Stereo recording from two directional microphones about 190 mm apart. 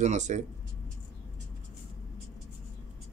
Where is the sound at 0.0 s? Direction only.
40° right (ahead or behind).